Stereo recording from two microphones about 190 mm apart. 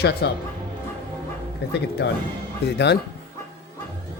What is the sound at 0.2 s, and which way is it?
Speech, 65° left (ahead or behind).